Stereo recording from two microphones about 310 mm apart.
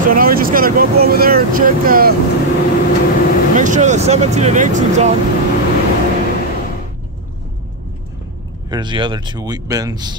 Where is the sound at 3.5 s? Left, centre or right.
Right.